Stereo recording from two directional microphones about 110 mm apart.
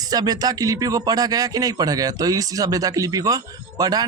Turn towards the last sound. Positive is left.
turn(degrees=-35)  # may be behind; listen again after turning